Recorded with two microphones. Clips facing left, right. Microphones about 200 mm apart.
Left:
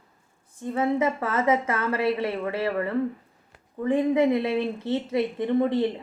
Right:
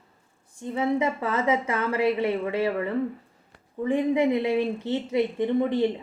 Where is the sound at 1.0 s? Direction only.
15° right (ahead or behind).